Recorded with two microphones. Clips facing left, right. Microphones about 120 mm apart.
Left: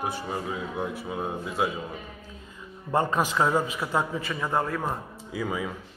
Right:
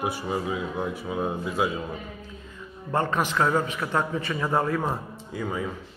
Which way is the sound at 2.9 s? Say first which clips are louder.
Left 1 dB; 15° left (ahead or behind).